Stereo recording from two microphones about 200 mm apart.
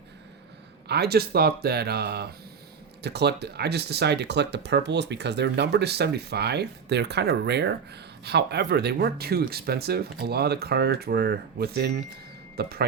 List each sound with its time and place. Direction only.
0.9 s a man's voice: 55° right (ahead or behind)